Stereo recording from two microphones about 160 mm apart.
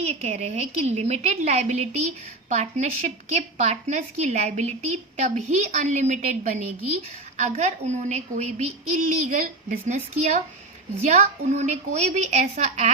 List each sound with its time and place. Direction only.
0.0 s a woman's voice: 40° right (ahead or behind)